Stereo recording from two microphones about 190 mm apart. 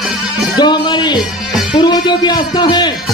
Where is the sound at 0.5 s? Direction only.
25° left (ahead or behind).